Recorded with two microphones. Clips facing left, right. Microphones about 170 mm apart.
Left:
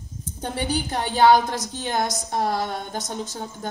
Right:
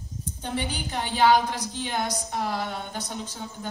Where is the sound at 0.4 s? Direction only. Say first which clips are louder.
Left 5 dB; 45° left (ahead or behind).